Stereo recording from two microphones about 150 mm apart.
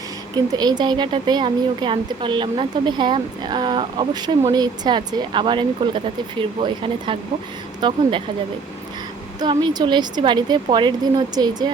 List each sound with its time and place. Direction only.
0.5 s a woman's voice: 30° right (ahead or behind)
9.4 s a woman's voice: 30° right (ahead or behind)